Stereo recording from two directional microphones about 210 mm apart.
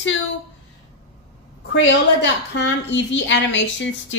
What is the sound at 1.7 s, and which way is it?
A woman's voice, 60° left (ahead or behind).